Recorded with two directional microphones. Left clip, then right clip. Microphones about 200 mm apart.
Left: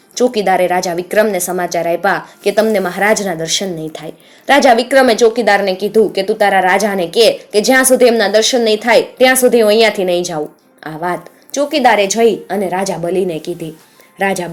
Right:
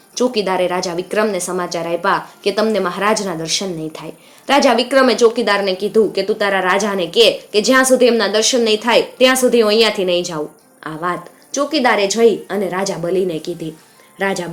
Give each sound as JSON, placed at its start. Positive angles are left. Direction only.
{"t": 0.1, "sound": "a woman's voice", "side_deg": 20}